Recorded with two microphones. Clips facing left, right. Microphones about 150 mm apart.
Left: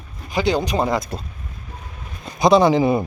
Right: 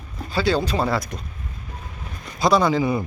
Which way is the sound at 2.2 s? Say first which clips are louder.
Left 4 dB; 20° left (ahead or behind).